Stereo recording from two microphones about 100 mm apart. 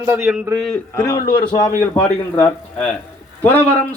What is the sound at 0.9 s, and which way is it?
Speech, 30° left (ahead or behind).